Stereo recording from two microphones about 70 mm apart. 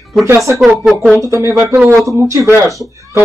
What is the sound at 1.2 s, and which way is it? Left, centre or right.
Speech, right.